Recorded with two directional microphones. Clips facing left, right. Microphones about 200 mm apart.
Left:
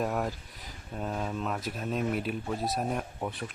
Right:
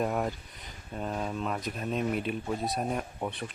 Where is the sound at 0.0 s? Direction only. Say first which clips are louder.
Right 1 dB; centre (ahead or behind).